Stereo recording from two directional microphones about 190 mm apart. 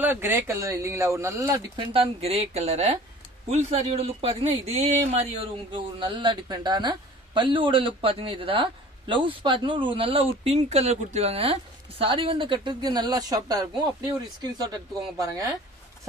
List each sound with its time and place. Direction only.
0.0 s speech: 10° right (ahead or behind)
2.0 s speech: 35° right (ahead or behind)